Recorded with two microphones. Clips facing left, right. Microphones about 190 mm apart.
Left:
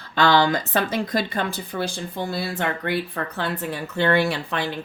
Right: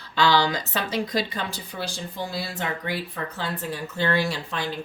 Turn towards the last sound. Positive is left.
turn(degrees=60)  # may be behind; listen again after turning